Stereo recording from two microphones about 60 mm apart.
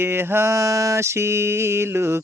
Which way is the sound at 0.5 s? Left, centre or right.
Right.